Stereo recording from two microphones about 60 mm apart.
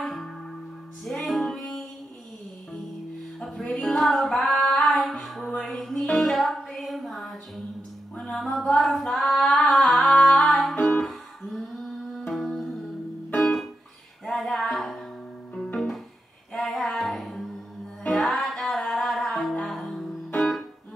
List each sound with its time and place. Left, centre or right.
0.0 s music: centre
3.4 s music: centre
8.2 s female singing: centre
10.1 s music: centre
10.4 s music: centre
14.2 s a sound: centre
15.5 s music: centre
16.5 s child singing: centre
18.1 s music: centre